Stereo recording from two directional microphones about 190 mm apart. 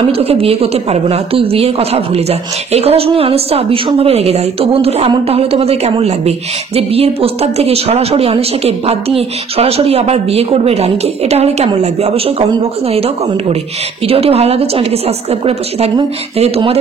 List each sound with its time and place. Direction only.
0.1 s a woman's voice: 30° right (ahead or behind)